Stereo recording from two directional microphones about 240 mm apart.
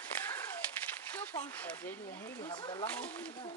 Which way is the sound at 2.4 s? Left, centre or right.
Centre.